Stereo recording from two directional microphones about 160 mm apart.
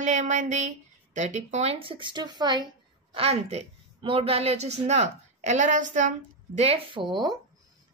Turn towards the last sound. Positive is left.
turn(degrees=-25)  # may be behind; listen again after turning